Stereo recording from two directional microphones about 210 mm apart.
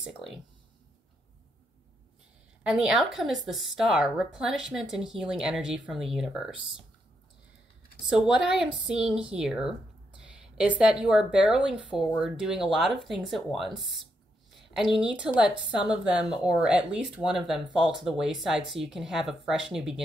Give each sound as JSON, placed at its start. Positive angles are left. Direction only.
{"t": 0.0, "sound": "speech", "side_deg": 0}
{"t": 2.6, "sound": "speech", "side_deg": -5}
{"t": 8.1, "sound": "a woman's voice", "side_deg": -5}